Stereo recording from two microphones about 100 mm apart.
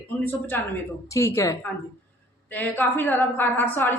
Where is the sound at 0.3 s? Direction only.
20° left (ahead or behind).